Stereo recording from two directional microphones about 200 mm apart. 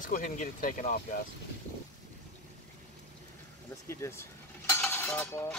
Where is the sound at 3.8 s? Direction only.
15° left (ahead or behind).